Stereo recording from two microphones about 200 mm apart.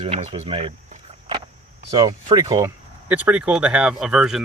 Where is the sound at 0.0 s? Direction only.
30° right (ahead or behind).